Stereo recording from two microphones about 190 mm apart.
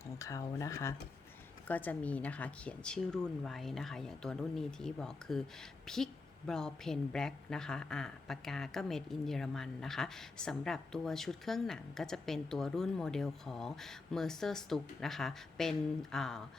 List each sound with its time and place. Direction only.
0.2 s a woman's voice: 15° left (ahead or behind)
6.5 s a woman's voice: 5° left (ahead or behind)